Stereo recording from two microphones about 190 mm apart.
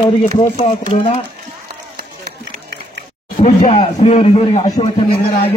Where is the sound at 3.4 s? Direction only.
40° left (ahead or behind).